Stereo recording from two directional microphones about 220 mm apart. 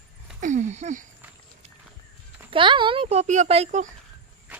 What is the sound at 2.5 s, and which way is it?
A child's voice, 20° right (ahead or behind).